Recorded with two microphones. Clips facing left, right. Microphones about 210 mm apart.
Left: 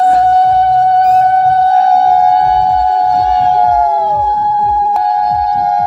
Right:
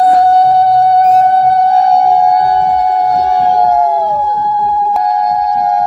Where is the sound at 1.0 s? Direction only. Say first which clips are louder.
Right 1 dB; 15° right (ahead or behind).